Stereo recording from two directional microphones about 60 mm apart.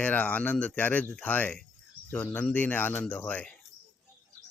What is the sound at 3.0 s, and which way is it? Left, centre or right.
Speech, left.